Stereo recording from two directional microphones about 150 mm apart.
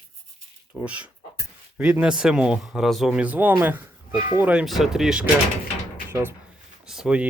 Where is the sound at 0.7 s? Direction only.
5° right (ahead or behind).